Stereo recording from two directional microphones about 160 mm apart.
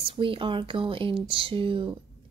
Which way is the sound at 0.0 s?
35° right (ahead or behind).